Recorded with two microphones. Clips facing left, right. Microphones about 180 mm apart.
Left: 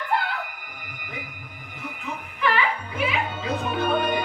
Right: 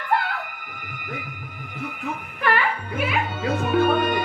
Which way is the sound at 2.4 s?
50° right (ahead or behind).